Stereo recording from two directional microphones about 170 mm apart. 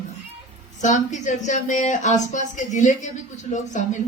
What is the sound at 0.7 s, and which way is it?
Speech, 45° left (ahead or behind).